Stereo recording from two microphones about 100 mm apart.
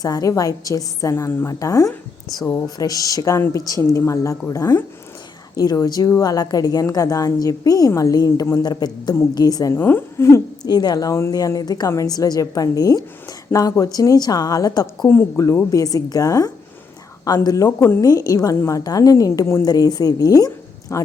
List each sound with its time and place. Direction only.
0.0 s a woman's voice: 35° left (ahead or behind)
1.1 s a woman's voice: 25° left (ahead or behind)
1.5 s a woman's voice: 35° left (ahead or behind)
9.7 s a woman's voice: 20° left (ahead or behind)
10.7 s a woman's voice: 45° left (ahead or behind)
15.0 s a woman's voice: 25° left (ahead or behind)
17.7 s a woman's voice: 25° left (ahead or behind)
18.0 s a woman's voice: 35° left (ahead or behind)